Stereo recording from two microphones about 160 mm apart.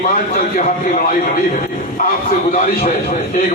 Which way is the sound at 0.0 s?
55° left (ahead or behind).